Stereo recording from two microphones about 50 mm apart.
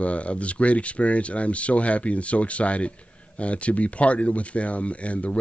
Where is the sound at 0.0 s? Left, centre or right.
Left.